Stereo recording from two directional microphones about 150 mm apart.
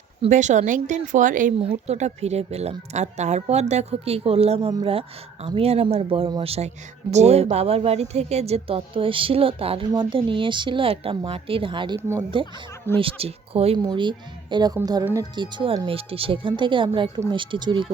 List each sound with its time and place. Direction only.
0.3 s speech: 55° right (ahead or behind)
1.7 s a woman's voice: 50° right (ahead or behind)
11.9 s speech: 15° right (ahead or behind)
13.0 s a woman's voice: 40° right (ahead or behind)
13.7 s a woman's voice: 30° right (ahead or behind)